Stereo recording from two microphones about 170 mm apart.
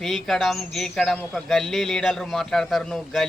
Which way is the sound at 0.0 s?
Centre (ahead or behind).